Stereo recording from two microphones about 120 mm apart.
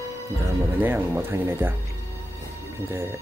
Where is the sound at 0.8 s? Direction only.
20° right (ahead or behind).